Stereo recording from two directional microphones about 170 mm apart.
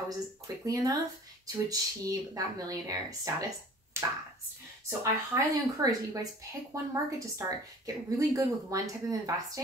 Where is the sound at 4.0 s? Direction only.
15° right (ahead or behind).